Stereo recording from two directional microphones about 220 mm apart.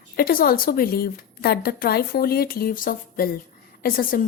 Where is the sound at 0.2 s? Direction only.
40° left (ahead or behind).